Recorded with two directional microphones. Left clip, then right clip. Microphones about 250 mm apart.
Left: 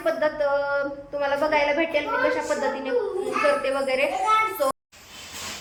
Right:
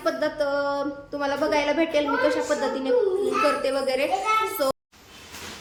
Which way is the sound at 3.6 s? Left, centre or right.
Centre.